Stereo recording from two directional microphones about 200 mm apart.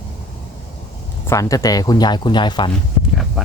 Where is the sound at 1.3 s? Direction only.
15° left (ahead or behind).